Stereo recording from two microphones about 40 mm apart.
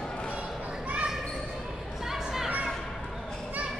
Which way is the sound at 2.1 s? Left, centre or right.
Centre.